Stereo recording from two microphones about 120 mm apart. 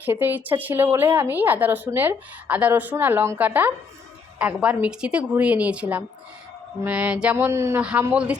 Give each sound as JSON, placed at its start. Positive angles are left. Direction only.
{"t": 0.0, "sound": "a woman's voice", "side_deg": -15}
{"t": 7.8, "sound": "a woman's voice", "side_deg": -10}